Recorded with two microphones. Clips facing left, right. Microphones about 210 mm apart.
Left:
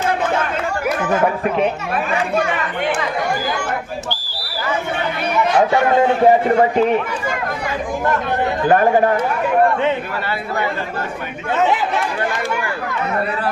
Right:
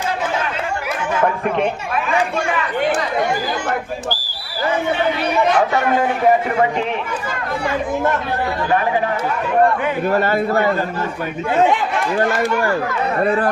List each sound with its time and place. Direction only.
5.5 s a man's voice: 25° left (ahead or behind)
10.1 s a man's voice: 45° right (ahead or behind)
13.2 s a man's voice: 50° right (ahead or behind)